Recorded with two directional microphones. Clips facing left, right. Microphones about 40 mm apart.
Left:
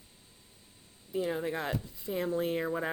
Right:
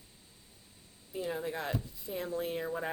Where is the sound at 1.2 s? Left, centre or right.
Left.